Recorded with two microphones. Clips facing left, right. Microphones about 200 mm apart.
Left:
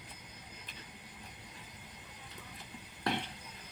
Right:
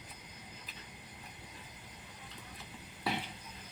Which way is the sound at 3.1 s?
5° right (ahead or behind).